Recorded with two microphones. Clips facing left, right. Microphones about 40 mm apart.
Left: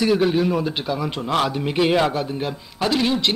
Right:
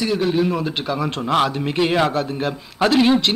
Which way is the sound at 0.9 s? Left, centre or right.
Centre.